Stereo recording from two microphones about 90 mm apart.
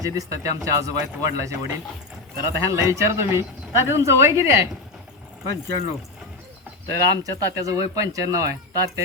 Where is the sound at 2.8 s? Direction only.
30° right (ahead or behind).